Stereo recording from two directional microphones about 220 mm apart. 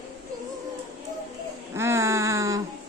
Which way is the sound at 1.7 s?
10° right (ahead or behind).